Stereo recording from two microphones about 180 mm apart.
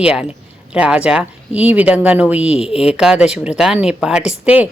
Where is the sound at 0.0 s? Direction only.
5° right (ahead or behind).